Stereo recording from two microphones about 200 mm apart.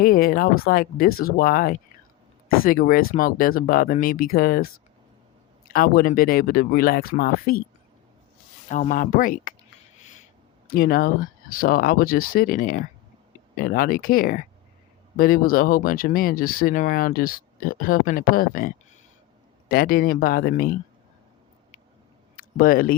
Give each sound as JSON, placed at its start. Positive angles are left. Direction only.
{"t": 0.0, "sound": "speech", "side_deg": 45}
{"t": 8.7, "sound": "speech", "side_deg": 40}
{"t": 10.0, "sound": "a sound", "side_deg": 40}
{"t": 10.7, "sound": "speech", "side_deg": 50}
{"t": 22.4, "sound": "speech", "side_deg": 45}